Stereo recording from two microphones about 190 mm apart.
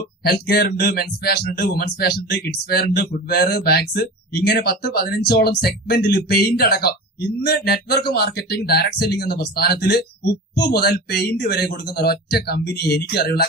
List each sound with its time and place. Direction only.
0.3 s speech: 55° left (ahead or behind)